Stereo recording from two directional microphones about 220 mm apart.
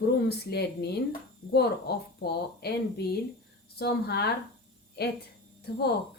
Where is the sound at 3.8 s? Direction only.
45° left (ahead or behind).